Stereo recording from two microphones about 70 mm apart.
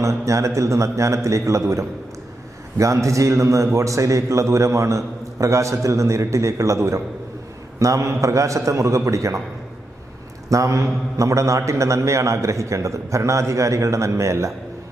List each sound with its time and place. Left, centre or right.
0.0 s a man's voice: right
10.5 s a man's voice: right